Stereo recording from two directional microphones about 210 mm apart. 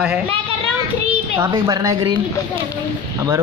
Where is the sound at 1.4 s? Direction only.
20° right (ahead or behind).